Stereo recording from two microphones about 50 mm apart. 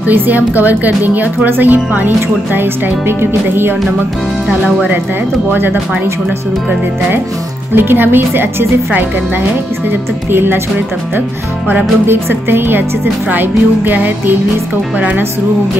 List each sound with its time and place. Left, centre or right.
0.1 s speech: right
5.5 s speech: right
7.7 s speech: right
12.1 s speech: right